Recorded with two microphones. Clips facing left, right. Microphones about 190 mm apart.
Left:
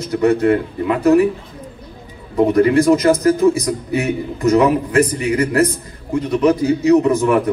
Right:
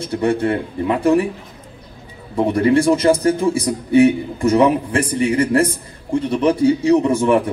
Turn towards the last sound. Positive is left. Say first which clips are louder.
# left 1 dB
turn(degrees=-30)  # may be behind; listen again after turning